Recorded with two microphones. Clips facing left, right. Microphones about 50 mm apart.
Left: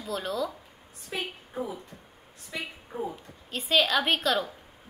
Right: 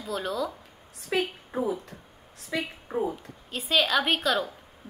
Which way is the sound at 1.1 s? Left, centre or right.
Right.